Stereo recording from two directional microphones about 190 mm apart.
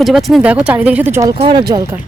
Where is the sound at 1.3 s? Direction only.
25° right (ahead or behind).